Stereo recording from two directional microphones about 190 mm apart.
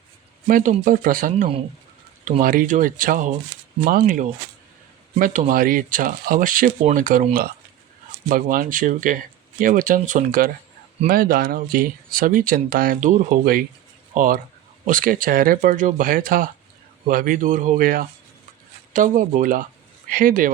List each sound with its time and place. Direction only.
0.4 s speech: 40° right (ahead or behind)